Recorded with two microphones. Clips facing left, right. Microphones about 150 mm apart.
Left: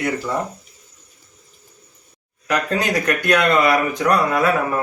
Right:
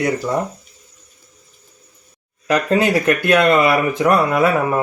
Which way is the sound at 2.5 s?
30° right (ahead or behind).